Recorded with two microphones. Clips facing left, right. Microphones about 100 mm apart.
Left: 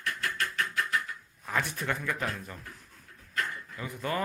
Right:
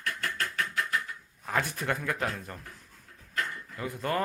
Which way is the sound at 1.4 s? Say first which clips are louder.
Right 1 dB; 45° right (ahead or behind).